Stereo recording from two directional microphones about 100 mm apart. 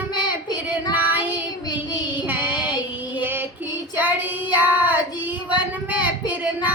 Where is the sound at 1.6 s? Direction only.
45° left (ahead or behind).